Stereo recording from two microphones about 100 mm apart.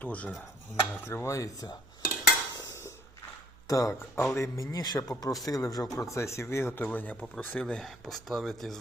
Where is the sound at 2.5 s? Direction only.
30° left (ahead or behind).